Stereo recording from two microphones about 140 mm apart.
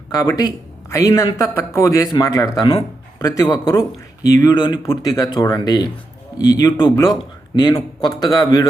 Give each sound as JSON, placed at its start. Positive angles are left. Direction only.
{"t": 0.1, "sound": "a man's voice", "side_deg": 25}